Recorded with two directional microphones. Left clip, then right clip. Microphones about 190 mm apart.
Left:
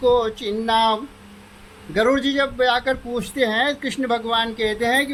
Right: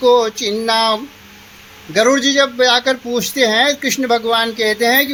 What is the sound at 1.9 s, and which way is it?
Speech, 45° right (ahead or behind).